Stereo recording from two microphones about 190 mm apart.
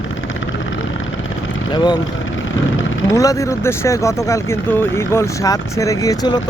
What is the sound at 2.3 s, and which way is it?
Vehicle, 90° left.